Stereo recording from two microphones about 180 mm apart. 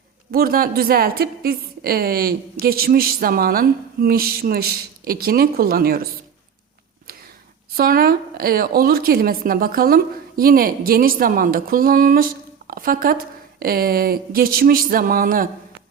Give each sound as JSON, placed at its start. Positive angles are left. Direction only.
{"t": 0.3, "sound": "a woman's voice", "side_deg": -55}
{"t": 7.1, "sound": "a sound", "side_deg": -60}
{"t": 7.8, "sound": "a woman's voice", "side_deg": -55}